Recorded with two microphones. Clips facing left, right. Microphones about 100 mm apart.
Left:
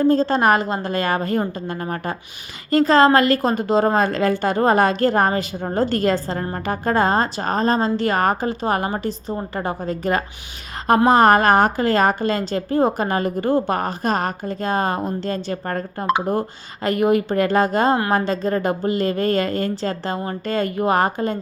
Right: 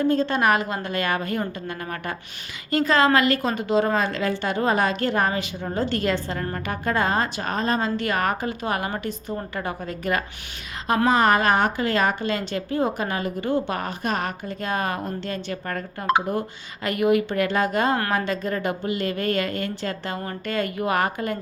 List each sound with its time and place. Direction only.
0.0 s a woman's voice: 35° left (ahead or behind)
11.1 s a woman's voice: 45° left (ahead or behind)